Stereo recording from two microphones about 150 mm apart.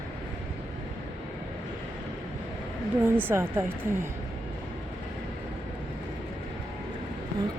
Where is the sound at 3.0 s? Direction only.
15° right (ahead or behind).